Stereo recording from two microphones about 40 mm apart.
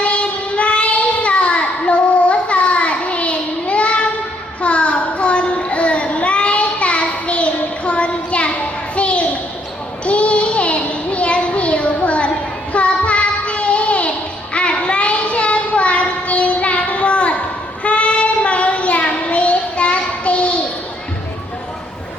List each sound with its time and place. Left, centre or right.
0.0 s child singing: left
9.0 s a sound: left
10.1 s child singing: left